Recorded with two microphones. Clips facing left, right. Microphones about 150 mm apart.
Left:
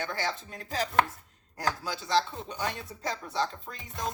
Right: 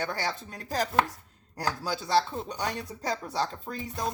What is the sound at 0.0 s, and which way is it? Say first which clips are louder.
Speech: right 1 dB; 45° right (ahead or behind).